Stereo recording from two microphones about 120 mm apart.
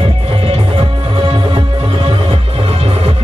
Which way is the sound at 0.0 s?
50° right (ahead or behind).